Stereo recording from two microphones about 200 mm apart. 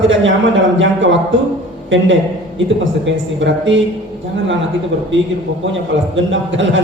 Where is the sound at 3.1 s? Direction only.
65° right (ahead or behind).